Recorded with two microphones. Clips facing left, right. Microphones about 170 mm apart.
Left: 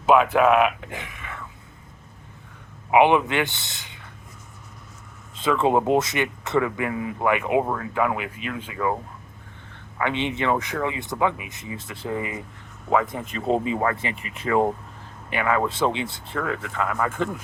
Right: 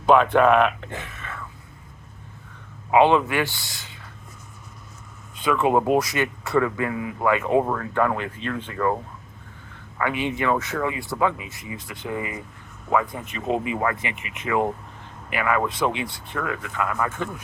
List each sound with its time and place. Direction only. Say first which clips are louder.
0.0 s speech: right 1 dB; 5° left (ahead or behind)
2.9 s speech: even; 15° left (ahead or behind)
5.3 s speech: even; 25° left (ahead or behind); by 8.9 s 10° left (ahead or behind)
10.0 s speech: even; 25° left (ahead or behind)